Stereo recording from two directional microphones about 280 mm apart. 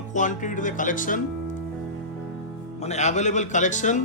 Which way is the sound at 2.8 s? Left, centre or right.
Left.